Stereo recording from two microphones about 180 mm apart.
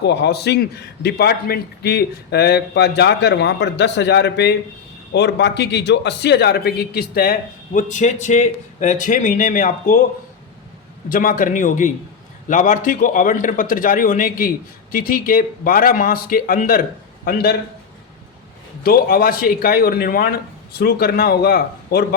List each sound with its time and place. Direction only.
0.0 s a man's voice: 70° left (ahead or behind); by 10.0 s 45° left (ahead or behind)
11.1 s a man's voice: 50° left (ahead or behind)
18.8 s a man's voice: 55° left (ahead or behind)